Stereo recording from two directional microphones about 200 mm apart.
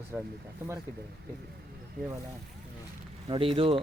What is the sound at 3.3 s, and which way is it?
Speech, 25° right (ahead or behind).